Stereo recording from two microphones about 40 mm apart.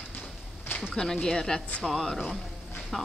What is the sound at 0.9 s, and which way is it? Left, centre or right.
Speech, centre.